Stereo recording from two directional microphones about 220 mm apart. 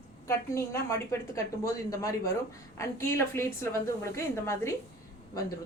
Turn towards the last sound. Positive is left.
turn(degrees=15)  # may be behind; listen again after turning